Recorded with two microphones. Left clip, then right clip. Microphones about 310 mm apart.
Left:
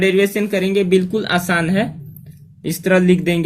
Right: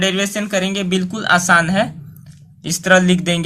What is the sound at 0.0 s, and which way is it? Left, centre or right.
Speech, right.